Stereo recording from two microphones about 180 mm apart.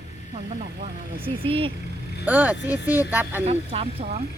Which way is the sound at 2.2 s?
10° right (ahead or behind).